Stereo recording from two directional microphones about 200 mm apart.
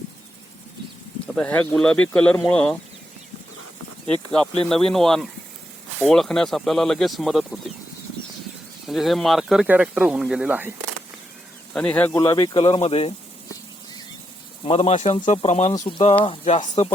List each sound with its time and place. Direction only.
1.4 s speech: 5° left (ahead or behind)
4.0 s speech: 5° left (ahead or behind)
8.9 s speech: centre (ahead or behind)
11.7 s speech: 5° left (ahead or behind)
12.5 s speech: 25° left (ahead or behind)
14.6 s speech: 30° left (ahead or behind)
15.7 s speech: 15° left (ahead or behind); by 16.9 s 35° left (ahead or behind)